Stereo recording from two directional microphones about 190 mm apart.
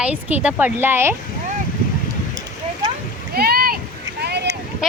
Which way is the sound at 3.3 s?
55° right (ahead or behind).